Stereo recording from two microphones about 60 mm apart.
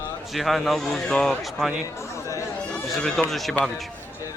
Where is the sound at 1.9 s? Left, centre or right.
Left.